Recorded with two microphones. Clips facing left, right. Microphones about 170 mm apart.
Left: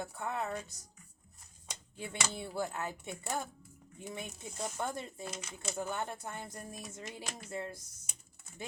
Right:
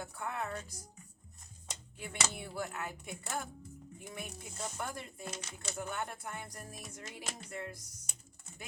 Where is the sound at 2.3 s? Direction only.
30° left (ahead or behind).